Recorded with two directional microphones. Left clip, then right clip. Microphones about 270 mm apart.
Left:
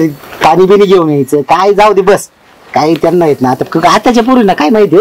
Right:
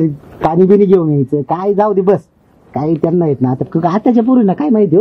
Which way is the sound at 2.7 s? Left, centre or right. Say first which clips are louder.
Left 8 dB; centre.